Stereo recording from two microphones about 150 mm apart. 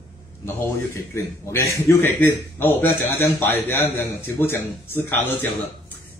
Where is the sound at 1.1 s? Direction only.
20° left (ahead or behind).